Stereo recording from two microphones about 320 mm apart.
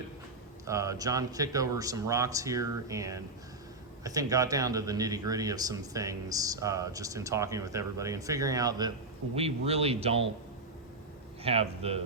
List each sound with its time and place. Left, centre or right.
0.7 s speech: centre
11.4 s speech: centre